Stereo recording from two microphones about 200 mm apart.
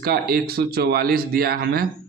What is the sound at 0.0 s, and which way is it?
Speech, 50° right (ahead or behind).